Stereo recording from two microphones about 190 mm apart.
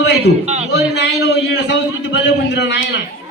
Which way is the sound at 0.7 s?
60° left (ahead or behind).